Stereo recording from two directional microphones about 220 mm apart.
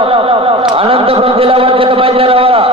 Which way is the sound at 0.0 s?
25° right (ahead or behind).